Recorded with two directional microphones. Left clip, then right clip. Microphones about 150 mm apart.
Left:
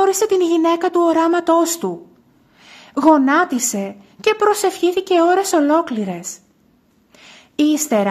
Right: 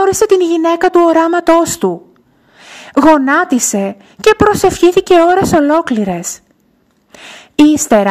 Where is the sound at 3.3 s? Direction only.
45° right (ahead or behind).